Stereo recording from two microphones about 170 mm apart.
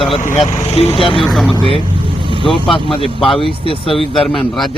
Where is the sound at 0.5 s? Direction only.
40° left (ahead or behind).